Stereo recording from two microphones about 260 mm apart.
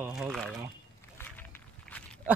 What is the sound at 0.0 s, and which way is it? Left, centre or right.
Crumpling, centre.